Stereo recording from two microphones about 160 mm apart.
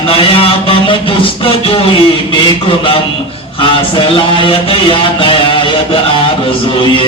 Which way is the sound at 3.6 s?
30° left (ahead or behind).